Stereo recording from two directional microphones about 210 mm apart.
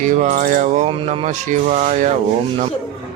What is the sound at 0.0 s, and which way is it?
Speech, 35° right (ahead or behind).